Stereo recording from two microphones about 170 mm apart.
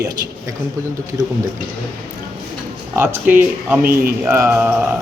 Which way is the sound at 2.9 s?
10° right (ahead or behind).